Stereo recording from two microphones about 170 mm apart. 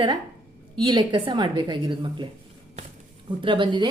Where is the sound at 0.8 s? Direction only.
25° right (ahead or behind).